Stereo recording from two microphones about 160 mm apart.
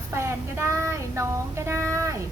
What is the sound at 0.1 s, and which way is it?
Child singing, 15° right (ahead or behind).